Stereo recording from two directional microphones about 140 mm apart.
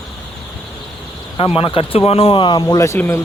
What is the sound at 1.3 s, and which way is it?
Speech, 40° left (ahead or behind).